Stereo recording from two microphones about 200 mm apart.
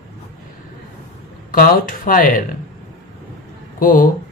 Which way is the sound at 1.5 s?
45° left (ahead or behind).